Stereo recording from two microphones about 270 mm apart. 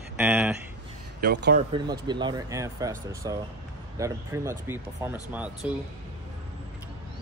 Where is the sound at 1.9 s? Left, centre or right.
Centre.